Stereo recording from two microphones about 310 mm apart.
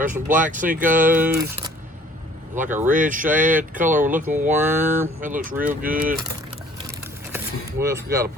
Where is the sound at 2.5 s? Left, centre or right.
Right.